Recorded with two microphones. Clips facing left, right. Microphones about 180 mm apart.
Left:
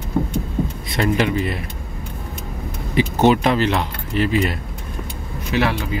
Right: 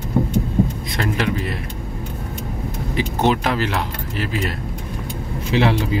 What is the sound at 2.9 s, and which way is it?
Speech, centre (ahead or behind).